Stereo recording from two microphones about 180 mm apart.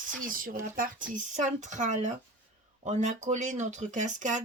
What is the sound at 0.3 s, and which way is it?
Speech, 50° right (ahead or behind).